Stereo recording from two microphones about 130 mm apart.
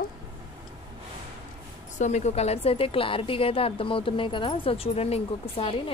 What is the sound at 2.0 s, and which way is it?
A woman's voice, 60° left (ahead or behind).